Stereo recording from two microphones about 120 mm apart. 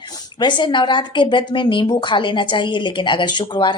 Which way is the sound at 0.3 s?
40° left (ahead or behind).